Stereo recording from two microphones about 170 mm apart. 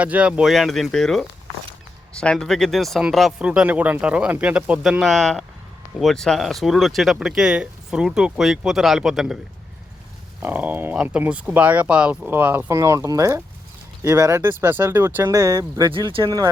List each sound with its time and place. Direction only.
0.0 s speech: 5° right (ahead or behind)
2.2 s speech: 5° left (ahead or behind)
10.4 s speech: 10° right (ahead or behind)
15.9 s speech: 30° right (ahead or behind)